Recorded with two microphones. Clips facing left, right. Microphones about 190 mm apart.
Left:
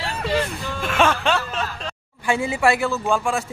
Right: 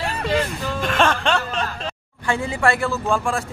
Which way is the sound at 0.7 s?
5° left (ahead or behind).